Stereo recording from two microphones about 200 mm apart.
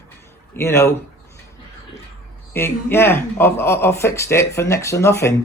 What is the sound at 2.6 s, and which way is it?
Speech, 10° left (ahead or behind).